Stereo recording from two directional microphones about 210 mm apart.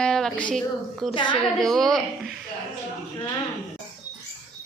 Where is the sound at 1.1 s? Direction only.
20° left (ahead or behind).